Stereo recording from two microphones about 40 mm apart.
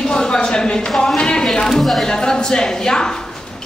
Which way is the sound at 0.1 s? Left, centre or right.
Centre.